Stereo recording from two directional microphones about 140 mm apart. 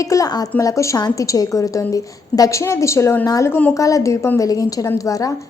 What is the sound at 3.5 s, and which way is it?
Speech, 10° left (ahead or behind).